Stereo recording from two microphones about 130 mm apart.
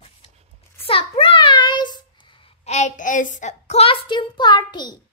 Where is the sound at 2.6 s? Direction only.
60° left (ahead or behind); by 4.9 s 35° left (ahead or behind).